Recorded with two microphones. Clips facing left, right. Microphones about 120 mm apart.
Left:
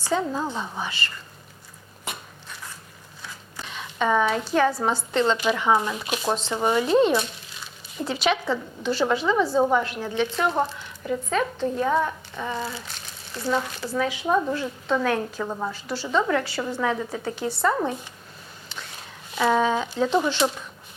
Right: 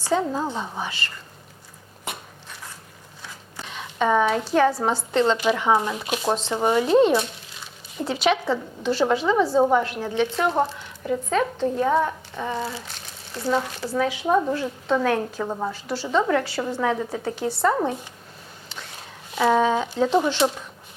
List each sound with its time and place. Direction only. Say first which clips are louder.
0.0 s a woman's voice: right 2 dB; 35° right (ahead or behind)
3.2 s a sound: even; 45° right (ahead or behind)
4.5 s a woman's voice: right 2 dB; 40° right (ahead or behind)
5.1 s speech: right 2 dB; 55° right (ahead or behind)
8.4 s a woman's voice: right 2 dB; 40° right (ahead or behind)
10.0 s speech: right 2 dB; 40° right (ahead or behind)
10.5 s a woman's voice: right 2 dB; 30° right (ahead or behind); by 14.3 s 50° right (ahead or behind)
14.3 s a woman's voice: right 2 dB; 30° right (ahead or behind)
15.7 s a woman's voice: right 1 dB; 45° right (ahead or behind)
18.7 s a sound: even; 45° right (ahead or behind)
20.1 s speech: right 2 dB; 55° right (ahead or behind)